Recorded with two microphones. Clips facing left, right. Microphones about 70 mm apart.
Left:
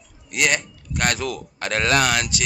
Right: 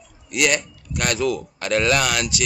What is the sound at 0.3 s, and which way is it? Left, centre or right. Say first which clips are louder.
A man's voice: right 1 dB; left.